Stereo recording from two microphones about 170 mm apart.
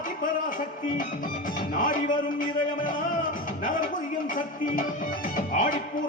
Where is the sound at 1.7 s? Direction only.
50° left (ahead or behind).